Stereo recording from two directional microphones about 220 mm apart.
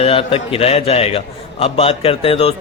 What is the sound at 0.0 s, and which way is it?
A man's voice, 25° left (ahead or behind).